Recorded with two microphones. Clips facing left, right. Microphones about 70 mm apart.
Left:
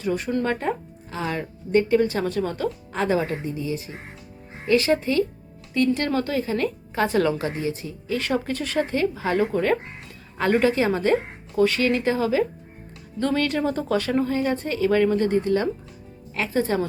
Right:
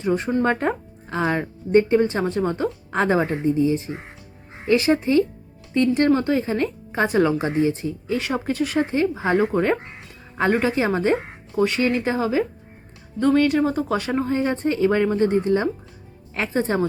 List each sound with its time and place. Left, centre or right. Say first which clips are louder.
0.0 s speech: right 3 dB; right
0.4 s speech: right 3 dB; right
2.9 s speech: right 4 dB; right; by 7.5 s centre
7.6 s speech: right 7 dB; right
8.2 s speech: right 1 dB; centre
13.1 s speech: right 5 dB; centre
14.3 s speech: right 2 dB; right